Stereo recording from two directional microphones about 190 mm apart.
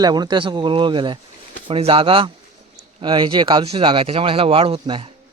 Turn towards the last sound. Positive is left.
turn(degrees=-25)  # may be behind; listen again after turning